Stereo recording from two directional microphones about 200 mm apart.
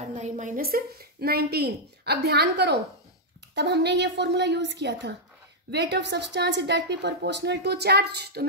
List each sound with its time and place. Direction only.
0.1 s a woman's voice: 40° right (ahead or behind); by 8.5 s 55° right (ahead or behind)